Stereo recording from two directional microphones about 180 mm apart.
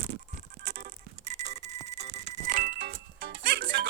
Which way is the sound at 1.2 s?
40° right (ahead or behind).